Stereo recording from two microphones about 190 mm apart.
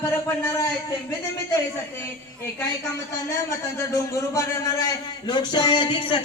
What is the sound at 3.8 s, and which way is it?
A man's voice, 15° left (ahead or behind).